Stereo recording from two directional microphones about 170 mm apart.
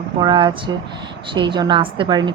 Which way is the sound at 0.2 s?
25° right (ahead or behind).